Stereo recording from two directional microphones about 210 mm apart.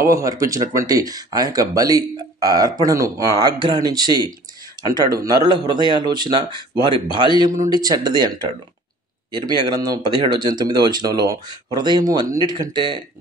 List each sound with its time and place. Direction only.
0.0 s speech: 15° right (ahead or behind)